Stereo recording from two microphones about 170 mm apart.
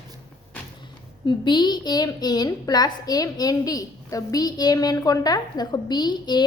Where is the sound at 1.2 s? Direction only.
25° left (ahead or behind).